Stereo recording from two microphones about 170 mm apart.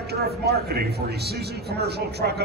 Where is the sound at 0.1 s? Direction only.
70° right (ahead or behind).